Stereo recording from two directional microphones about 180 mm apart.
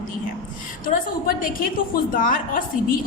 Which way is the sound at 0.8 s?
50° left (ahead or behind).